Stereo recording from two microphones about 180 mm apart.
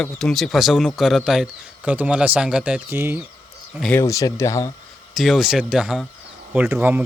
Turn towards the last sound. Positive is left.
turn(degrees=-10)  # may be behind; listen again after turning